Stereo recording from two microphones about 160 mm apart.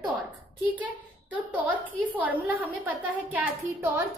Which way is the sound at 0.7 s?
10° right (ahead or behind).